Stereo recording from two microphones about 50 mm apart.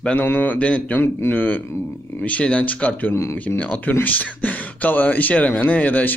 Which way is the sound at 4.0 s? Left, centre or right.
Left.